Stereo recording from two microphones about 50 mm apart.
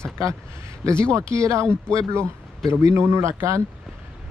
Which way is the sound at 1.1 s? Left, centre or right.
Right.